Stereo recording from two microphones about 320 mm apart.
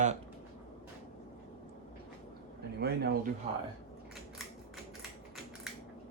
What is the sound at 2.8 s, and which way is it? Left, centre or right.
Speech, right.